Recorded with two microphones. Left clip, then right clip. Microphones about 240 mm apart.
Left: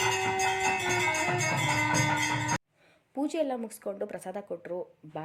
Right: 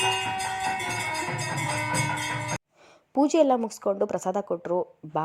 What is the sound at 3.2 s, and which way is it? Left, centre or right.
Speech, right.